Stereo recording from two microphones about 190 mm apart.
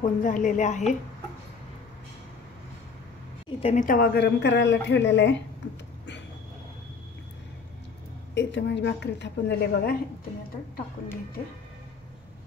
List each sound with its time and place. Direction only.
0.0 s a woman's voice: 45° left (ahead or behind)
3.4 s a woman's voice: 30° left (ahead or behind)
3.8 s speech: 50° left (ahead or behind); by 5.4 s 65° left (ahead or behind)
8.4 s speech: 65° left (ahead or behind)